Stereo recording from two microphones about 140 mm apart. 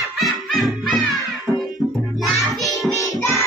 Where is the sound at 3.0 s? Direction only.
25° left (ahead or behind).